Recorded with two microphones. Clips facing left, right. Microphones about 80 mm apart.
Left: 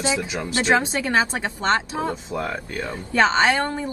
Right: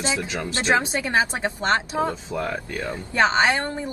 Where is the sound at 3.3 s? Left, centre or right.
Right.